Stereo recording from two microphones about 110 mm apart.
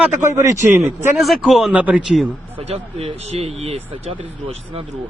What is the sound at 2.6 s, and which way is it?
Speech, 65° right (ahead or behind).